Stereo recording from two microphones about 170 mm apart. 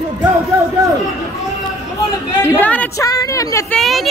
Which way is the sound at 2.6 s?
10° left (ahead or behind).